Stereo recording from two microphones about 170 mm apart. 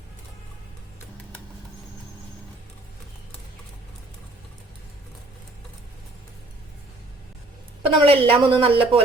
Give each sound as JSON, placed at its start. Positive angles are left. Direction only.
{"t": 7.8, "sound": "a woman's voice", "side_deg": -35}